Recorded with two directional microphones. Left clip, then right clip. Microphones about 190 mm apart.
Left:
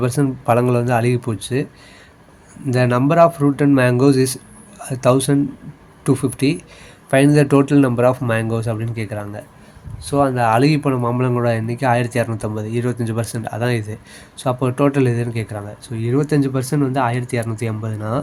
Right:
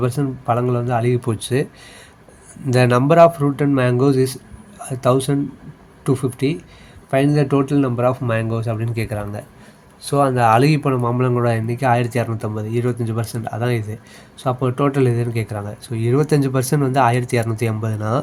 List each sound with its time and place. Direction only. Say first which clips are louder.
0.0 s speech: left 3 dB; 5° left (ahead or behind)
1.2 s speech: right 2 dB; 5° right (ahead or behind)
2.6 s a man's voice: right 2 dB; 5° right (ahead or behind)